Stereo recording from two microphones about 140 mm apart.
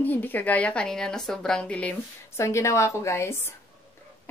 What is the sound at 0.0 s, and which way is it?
A woman's voice, 15° left (ahead or behind).